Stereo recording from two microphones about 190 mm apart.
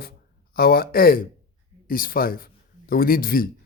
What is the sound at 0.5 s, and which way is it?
A man's voice, 55° left (ahead or behind).